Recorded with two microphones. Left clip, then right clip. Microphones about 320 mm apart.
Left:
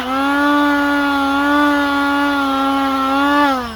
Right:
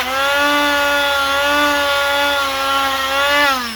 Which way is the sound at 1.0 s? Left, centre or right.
Centre.